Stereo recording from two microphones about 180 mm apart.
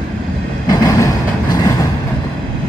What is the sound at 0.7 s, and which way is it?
Train, 20° left (ahead or behind).